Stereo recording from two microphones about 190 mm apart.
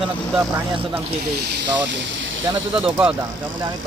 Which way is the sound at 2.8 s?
5° right (ahead or behind).